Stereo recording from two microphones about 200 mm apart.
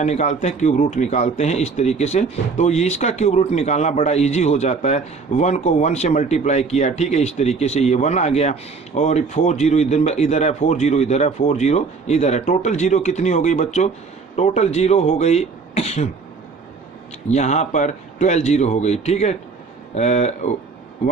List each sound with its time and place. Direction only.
0.0 s speech: 35° left (ahead or behind)
17.2 s speech: 35° left (ahead or behind)